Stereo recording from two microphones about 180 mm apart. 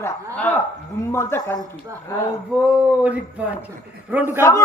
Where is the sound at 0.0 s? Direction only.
10° left (ahead or behind).